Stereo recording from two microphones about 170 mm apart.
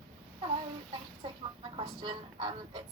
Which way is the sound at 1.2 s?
30° right (ahead or behind).